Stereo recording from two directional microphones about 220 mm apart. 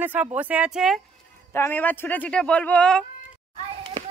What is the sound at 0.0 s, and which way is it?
Speech, 5° right (ahead or behind).